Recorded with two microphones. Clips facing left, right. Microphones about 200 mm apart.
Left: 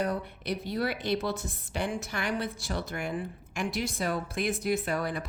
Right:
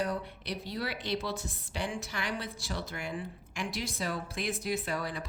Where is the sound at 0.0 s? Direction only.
55° left (ahead or behind).